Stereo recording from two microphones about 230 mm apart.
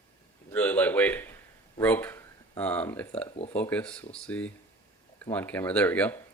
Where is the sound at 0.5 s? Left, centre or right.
Centre.